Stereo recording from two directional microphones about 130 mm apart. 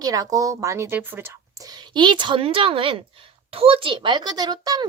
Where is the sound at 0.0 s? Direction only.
25° right (ahead or behind).